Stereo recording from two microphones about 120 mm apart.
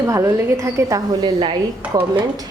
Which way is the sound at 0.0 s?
20° right (ahead or behind).